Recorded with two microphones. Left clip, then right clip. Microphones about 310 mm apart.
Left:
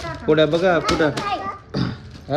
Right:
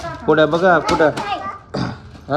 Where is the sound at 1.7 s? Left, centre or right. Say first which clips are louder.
Right 2 dB; centre.